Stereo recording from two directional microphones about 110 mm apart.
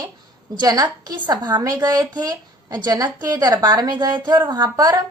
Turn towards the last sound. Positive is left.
turn(degrees=-35)  # may be behind; listen again after turning